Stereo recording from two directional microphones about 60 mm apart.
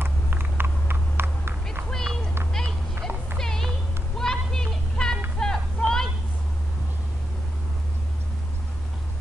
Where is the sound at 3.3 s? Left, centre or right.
Centre.